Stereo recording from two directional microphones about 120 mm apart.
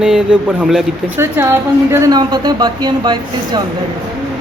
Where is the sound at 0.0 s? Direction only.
5° right (ahead or behind).